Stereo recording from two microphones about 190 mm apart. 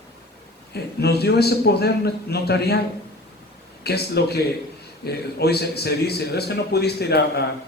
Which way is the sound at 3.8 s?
55° left (ahead or behind).